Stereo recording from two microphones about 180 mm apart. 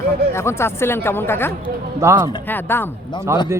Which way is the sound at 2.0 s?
15° right (ahead or behind).